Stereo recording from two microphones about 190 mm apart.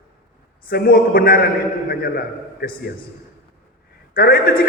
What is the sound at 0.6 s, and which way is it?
A man's voice, 55° left (ahead or behind).